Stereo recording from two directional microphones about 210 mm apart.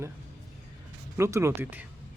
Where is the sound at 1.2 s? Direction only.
15° right (ahead or behind).